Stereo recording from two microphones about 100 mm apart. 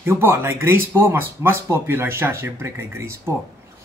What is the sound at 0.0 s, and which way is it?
Speech, 25° right (ahead or behind).